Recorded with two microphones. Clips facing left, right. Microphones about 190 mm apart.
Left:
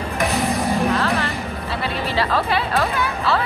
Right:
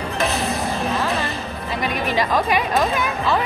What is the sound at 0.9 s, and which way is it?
Music, 20° right (ahead or behind).